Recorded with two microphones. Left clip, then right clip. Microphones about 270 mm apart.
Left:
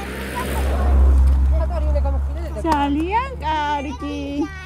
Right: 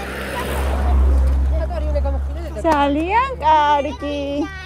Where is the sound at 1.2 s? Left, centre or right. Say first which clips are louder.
Right 1 dB; left.